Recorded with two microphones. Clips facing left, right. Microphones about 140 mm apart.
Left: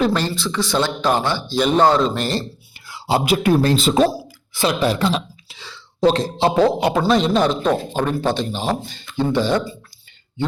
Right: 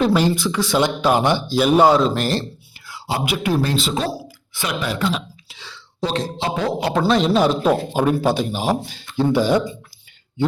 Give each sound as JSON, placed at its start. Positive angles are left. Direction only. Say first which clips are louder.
{"t": 0.0, "sound": "speech", "louder": "right 2 dB", "side_deg": -10}
{"t": 2.8, "sound": "a sound", "louder": "left 4 dB", "side_deg": 25}
{"t": 3.4, "sound": "speech", "louder": "left 4 dB", "side_deg": 45}
{"t": 4.5, "sound": "speech", "louder": "left 6 dB", "side_deg": 35}
{"t": 6.4, "sound": "a man's voice", "louder": "left 9 dB", "side_deg": 35}
{"t": 6.9, "sound": "speech", "louder": "even", "side_deg": 0}